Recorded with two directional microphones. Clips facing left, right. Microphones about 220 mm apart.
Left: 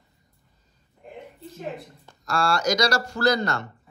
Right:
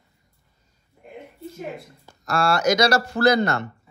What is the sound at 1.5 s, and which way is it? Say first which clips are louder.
Speech: left 1 dB; centre (ahead or behind).